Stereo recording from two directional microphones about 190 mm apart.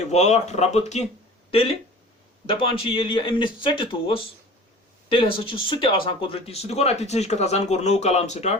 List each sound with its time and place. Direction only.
0.1 s speech: 35° left (ahead or behind)